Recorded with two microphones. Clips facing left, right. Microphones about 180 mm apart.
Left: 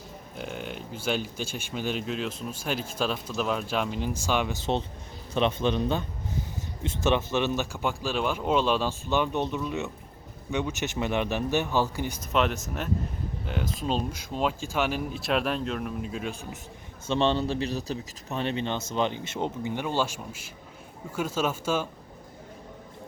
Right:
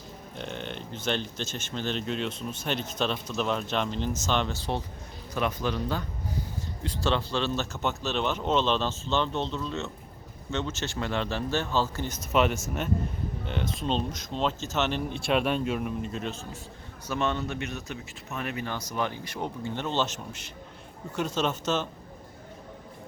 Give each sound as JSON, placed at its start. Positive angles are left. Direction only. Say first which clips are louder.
{"t": 0.3, "sound": "speech", "louder": "left 1 dB", "side_deg": 5}
{"t": 12.3, "sound": "speech", "louder": "right 2 dB", "side_deg": -5}
{"t": 17.1, "sound": "speech", "louder": "left 4 dB", "side_deg": 30}